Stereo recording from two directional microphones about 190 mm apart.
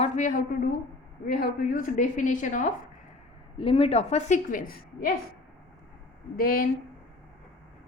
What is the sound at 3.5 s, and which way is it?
A woman's voice, 30° left (ahead or behind).